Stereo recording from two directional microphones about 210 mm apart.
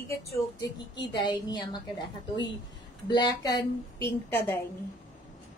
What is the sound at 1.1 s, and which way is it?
Speech, 20° left (ahead or behind).